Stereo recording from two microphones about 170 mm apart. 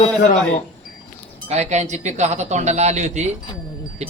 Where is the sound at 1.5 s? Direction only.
40° right (ahead or behind).